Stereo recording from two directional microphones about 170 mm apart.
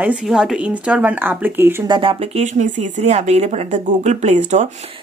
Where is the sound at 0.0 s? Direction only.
5° right (ahead or behind).